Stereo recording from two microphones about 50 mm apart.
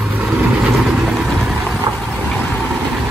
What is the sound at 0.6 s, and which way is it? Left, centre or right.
Vehicle, centre.